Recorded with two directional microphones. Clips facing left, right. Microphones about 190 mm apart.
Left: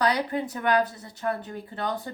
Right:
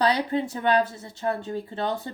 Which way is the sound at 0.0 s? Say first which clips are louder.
Right 2 dB; 25° right (ahead or behind).